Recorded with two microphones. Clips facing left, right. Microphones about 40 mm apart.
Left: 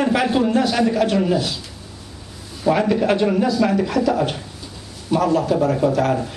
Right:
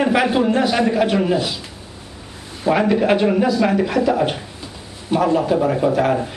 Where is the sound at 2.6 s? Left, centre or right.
Centre.